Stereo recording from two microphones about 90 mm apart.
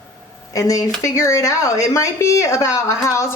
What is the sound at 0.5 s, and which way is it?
Speech, 40° left (ahead or behind).